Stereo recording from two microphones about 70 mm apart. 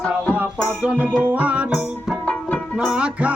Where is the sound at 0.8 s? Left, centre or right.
Right.